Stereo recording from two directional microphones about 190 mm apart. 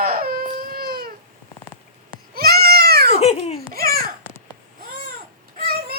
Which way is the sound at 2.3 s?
55° right (ahead or behind).